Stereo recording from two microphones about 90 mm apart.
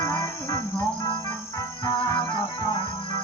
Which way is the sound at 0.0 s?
35° left (ahead or behind).